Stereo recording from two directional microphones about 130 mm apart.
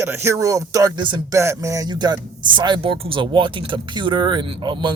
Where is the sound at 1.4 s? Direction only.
20° right (ahead or behind).